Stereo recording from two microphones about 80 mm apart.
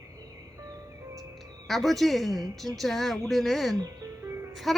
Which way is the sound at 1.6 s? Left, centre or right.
Centre.